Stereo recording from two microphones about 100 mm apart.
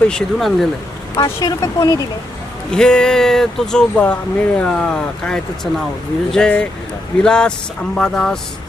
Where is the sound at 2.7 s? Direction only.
5° left (ahead or behind).